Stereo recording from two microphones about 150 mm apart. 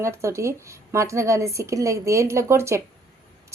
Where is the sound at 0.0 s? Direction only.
20° right (ahead or behind).